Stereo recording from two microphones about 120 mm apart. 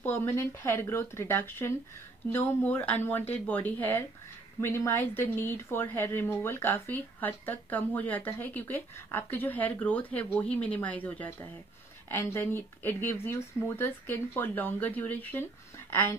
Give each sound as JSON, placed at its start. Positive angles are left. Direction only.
{"t": 0.0, "sound": "speech", "side_deg": 20}